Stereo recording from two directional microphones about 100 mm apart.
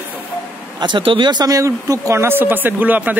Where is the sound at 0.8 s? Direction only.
50° right (ahead or behind); by 3.2 s 15° right (ahead or behind).